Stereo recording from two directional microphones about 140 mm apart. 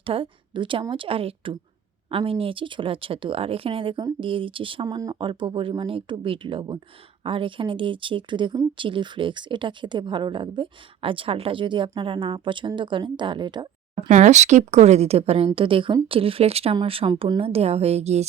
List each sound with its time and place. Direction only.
0.0 s speech: 40° right (ahead or behind)
14.1 s speech: 55° right (ahead or behind)